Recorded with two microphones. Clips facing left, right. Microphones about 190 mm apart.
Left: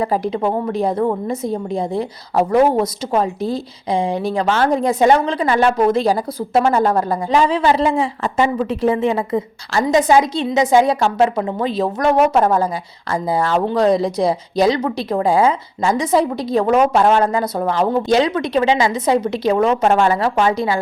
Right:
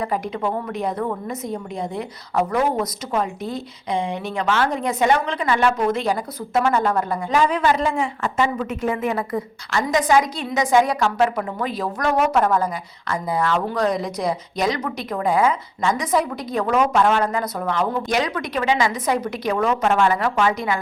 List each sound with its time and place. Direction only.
0.0 s a woman's voice: 30° left (ahead or behind)